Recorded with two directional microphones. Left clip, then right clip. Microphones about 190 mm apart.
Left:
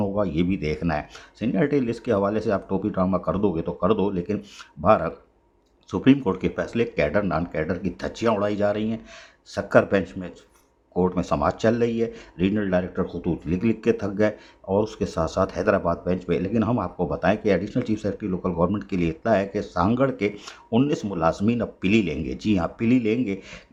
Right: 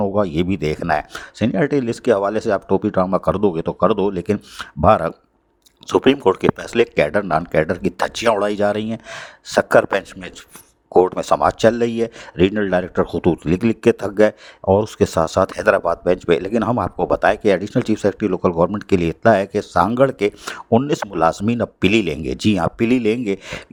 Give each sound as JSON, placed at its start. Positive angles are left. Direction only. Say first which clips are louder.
{"t": 0.1, "sound": "speech", "louder": "right 5 dB", "side_deg": -45}